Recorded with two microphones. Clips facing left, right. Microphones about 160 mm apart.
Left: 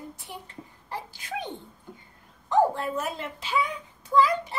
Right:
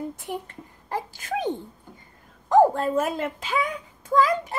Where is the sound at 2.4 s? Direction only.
45° right (ahead or behind).